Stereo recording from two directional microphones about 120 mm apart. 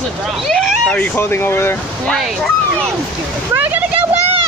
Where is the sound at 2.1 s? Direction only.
Centre (ahead or behind).